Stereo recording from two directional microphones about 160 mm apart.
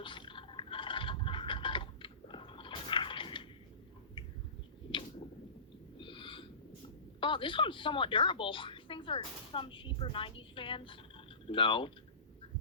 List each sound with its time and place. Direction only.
0.0 s a sound: 30° left (ahead or behind)
6.0 s snort: 30° left (ahead or behind)
7.2 s a woman's voice: 30° left (ahead or behind)